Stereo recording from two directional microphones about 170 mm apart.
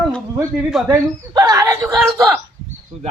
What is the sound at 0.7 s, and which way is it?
Speech, centre (ahead or behind).